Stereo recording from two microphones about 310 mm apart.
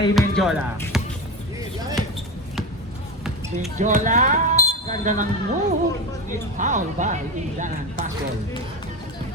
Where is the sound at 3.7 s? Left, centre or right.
Right.